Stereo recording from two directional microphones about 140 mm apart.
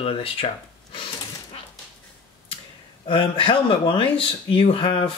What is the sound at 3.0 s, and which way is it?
Speech, 40° left (ahead or behind).